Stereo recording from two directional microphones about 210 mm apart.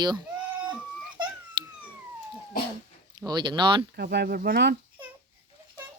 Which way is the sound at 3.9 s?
50° right (ahead or behind).